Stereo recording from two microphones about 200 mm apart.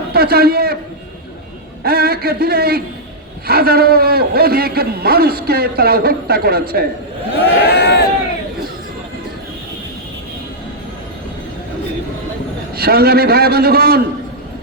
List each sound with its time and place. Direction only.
0.1 s a man's voice: 50° right (ahead or behind)
1.8 s a man's voice: 50° right (ahead or behind)
7.3 s speech: 60° left (ahead or behind)
12.7 s a man's voice: 50° right (ahead or behind)